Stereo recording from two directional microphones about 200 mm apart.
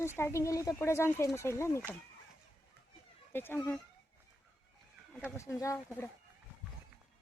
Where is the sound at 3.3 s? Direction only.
10° left (ahead or behind).